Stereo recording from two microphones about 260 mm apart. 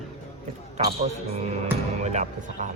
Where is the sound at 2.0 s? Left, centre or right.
Right.